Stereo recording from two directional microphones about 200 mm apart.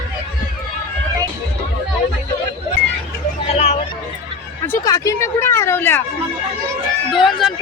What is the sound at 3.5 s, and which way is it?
Speech, 35° left (ahead or behind).